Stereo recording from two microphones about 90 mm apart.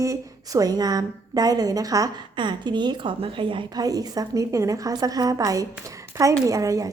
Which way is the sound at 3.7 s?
45° right (ahead or behind).